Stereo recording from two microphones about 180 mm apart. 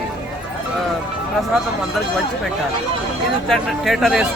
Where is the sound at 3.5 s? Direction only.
Centre (ahead or behind).